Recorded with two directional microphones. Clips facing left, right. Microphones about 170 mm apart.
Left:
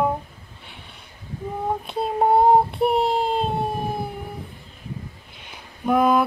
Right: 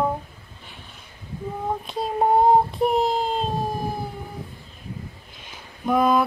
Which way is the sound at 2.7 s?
65° left (ahead or behind).